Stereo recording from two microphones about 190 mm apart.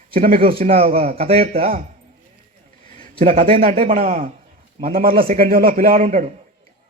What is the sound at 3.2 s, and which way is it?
Speech, 30° right (ahead or behind).